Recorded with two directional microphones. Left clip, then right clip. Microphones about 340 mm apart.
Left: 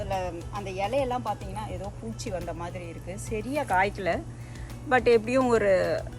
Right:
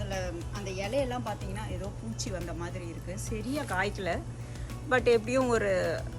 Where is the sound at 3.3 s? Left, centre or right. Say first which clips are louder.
Left 7 dB; left.